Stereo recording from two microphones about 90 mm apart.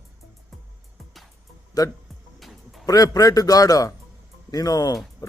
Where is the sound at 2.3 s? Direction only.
Centre (ahead or behind).